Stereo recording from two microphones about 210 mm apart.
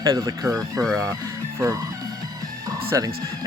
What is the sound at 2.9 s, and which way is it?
Speech, 15° right (ahead or behind).